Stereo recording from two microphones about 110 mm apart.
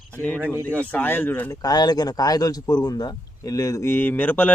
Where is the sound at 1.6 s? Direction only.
35° left (ahead or behind).